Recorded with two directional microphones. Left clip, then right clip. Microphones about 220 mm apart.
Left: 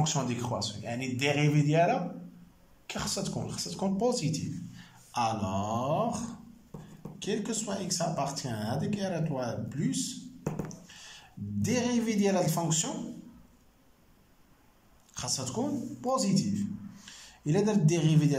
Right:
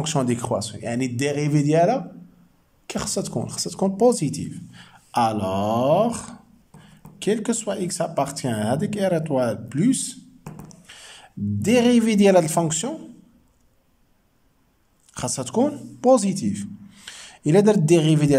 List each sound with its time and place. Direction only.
0.0 s speech: 35° right (ahead or behind)
15.1 s a man's voice: 40° right (ahead or behind)